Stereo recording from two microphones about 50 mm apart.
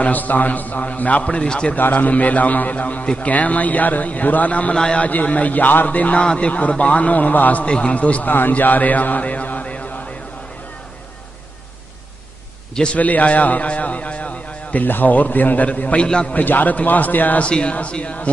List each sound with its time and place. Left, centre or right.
0.0 s a man's voice: left
1.2 s speech: centre
1.8 s a man's voice: left
4.7 s a man's voice: centre
5.0 s a man's voice: left
7.6 s speech: left
8.3 s speech: left
12.9 s a man's voice: left
16.3 s a man's voice: left
17.4 s speech: left